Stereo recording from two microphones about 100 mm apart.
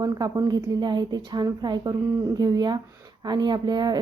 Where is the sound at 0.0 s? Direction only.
40° right (ahead or behind).